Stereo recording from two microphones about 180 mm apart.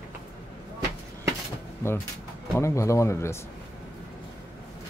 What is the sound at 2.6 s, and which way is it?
Speech, 15° left (ahead or behind).